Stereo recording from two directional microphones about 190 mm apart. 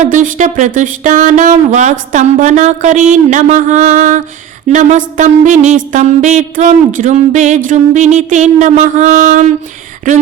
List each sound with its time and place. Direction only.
0.0 s speech: 40° right (ahead or behind)